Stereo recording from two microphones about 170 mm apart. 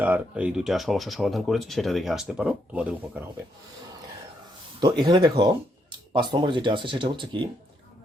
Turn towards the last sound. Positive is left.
turn(degrees=-30)  # may be behind; listen again after turning